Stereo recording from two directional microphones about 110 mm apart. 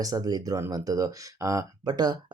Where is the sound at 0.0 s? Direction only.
35° right (ahead or behind).